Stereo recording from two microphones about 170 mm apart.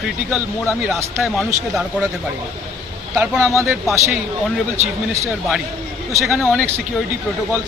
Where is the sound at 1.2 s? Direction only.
Centre (ahead or behind).